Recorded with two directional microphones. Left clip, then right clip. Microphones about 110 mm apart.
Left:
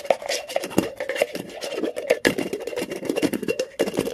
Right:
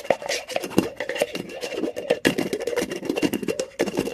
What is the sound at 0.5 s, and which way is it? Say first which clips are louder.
Scratch: even; 20° right (ahead or behind).